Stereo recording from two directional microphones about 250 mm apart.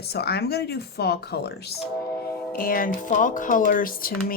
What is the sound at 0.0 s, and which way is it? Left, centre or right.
Speech, left.